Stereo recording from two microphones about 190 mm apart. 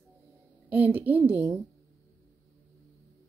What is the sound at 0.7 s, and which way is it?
Speech, 10° right (ahead or behind).